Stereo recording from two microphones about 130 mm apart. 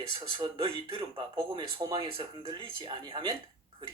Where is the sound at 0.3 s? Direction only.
40° right (ahead or behind).